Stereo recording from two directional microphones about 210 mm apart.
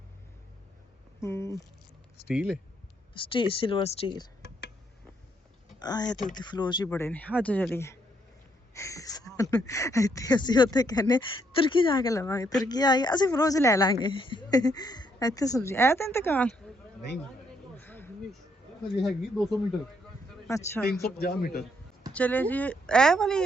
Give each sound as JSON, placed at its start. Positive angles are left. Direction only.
{"t": 1.2, "sound": "speech", "side_deg": 15}
{"t": 2.2, "sound": "speech", "side_deg": -5}
{"t": 3.2, "sound": "speech", "side_deg": 25}
{"t": 5.8, "sound": "speech", "side_deg": 20}
{"t": 17.7, "sound": "a sound", "side_deg": 10}
{"t": 19.0, "sound": "speech", "side_deg": 0}
{"t": 20.5, "sound": "speech", "side_deg": 15}
{"t": 21.0, "sound": "speech", "side_deg": 45}
{"t": 22.1, "sound": "speech", "side_deg": 5}